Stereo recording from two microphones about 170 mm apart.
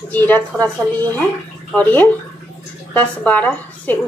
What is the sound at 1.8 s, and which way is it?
A woman's voice, 10° left (ahead or behind).